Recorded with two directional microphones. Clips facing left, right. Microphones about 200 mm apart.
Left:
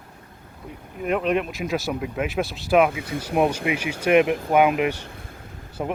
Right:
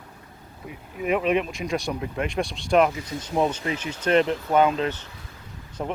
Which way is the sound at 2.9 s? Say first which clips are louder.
Left 3 dB; 55° left (ahead or behind).